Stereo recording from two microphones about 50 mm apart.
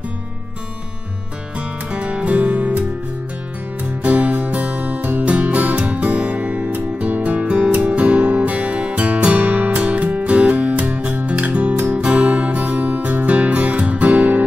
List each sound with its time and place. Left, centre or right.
1.9 s music: right
4.0 s music: right